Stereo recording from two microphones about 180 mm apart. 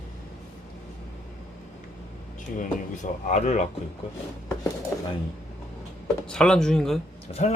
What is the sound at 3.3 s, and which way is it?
Speech, 40° left (ahead or behind).